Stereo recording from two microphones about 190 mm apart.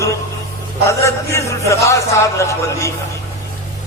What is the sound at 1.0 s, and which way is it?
Music, 15° left (ahead or behind).